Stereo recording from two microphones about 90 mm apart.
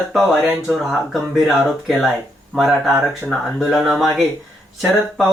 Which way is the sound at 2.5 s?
Centre (ahead or behind).